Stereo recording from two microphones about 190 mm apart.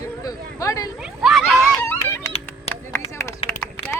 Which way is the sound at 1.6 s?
10° left (ahead or behind).